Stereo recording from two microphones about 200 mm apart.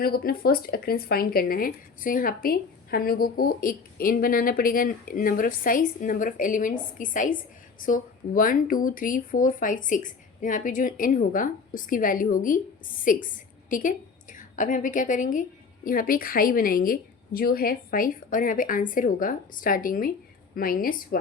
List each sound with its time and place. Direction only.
0.0 s speech: 50° left (ahead or behind)